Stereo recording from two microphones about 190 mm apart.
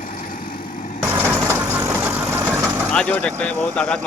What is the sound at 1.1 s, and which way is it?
Vehicle, 10° right (ahead or behind).